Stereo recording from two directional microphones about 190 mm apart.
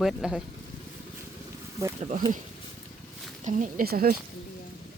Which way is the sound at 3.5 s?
40° right (ahead or behind).